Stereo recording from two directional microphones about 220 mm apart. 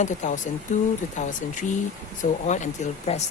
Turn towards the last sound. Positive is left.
turn(degrees=30)  # may be behind; listen again after turning